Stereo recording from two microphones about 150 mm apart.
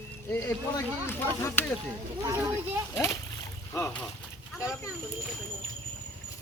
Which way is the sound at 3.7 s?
15° left (ahead or behind).